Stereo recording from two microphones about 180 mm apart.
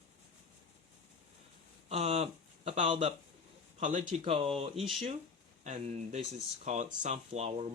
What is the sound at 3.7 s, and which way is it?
Speech, 45° right (ahead or behind).